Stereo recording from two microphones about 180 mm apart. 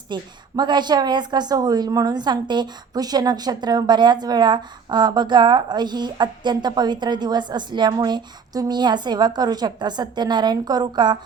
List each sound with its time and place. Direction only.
0.1 s a woman's voice: 25° right (ahead or behind)